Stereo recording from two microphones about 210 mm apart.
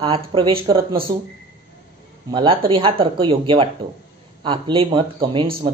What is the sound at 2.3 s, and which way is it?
Speech, 25° right (ahead or behind).